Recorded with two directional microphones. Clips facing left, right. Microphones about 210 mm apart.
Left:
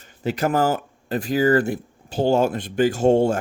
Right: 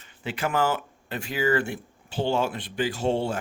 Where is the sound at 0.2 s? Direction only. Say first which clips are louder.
Left 5 dB; 40° left (ahead or behind).